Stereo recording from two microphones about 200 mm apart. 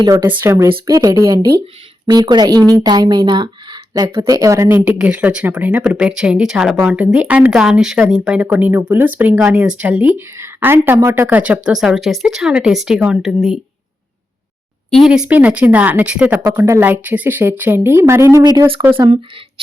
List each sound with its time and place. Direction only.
0.0 s speech: 15° right (ahead or behind)
14.8 s speech: centre (ahead or behind); by 19.2 s 25° right (ahead or behind)